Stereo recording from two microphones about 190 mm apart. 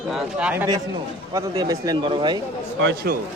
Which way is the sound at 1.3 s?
20° right (ahead or behind).